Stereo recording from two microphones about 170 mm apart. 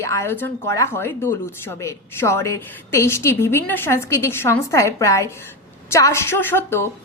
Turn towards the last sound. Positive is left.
turn(degrees=15)  # may be behind; listen again after turning